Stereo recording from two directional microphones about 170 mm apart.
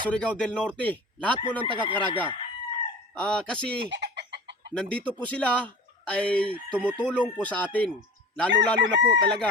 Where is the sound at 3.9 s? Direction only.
85° right.